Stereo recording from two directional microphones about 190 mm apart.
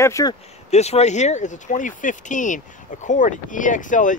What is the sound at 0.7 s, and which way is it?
Speech, 35° left (ahead or behind).